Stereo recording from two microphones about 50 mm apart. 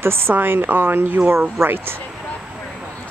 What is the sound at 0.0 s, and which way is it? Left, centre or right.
A woman's voice, right.